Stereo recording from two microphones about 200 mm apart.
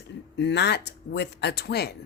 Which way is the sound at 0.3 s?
60° left (ahead or behind).